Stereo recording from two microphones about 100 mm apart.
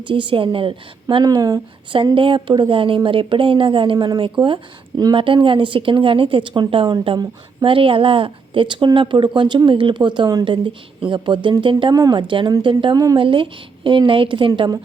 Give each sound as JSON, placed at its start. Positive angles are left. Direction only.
{"t": 0.0, "sound": "a woman's voice", "side_deg": -55}
{"t": 1.2, "sound": "speech", "side_deg": -40}
{"t": 2.1, "sound": "a woman's voice", "side_deg": -55}
{"t": 3.9, "sound": "speech", "side_deg": -40}
{"t": 4.2, "sound": "speech", "side_deg": -55}
{"t": 5.1, "sound": "a woman's voice", "side_deg": -60}
{"t": 10.4, "sound": "a woman's voice", "side_deg": -55}
{"t": 11.9, "sound": "speech", "side_deg": -35}
{"t": 12.6, "sound": "a woman's voice", "side_deg": -55}